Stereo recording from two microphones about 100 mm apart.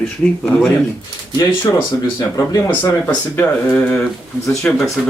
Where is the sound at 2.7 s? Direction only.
20° left (ahead or behind).